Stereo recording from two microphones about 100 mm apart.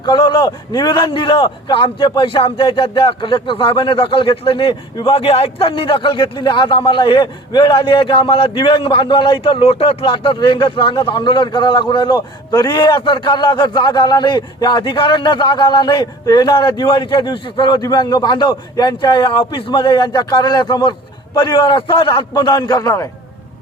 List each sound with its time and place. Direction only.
0.0 s a man's voice: 50° left (ahead or behind)
22.3 s speech: 40° left (ahead or behind)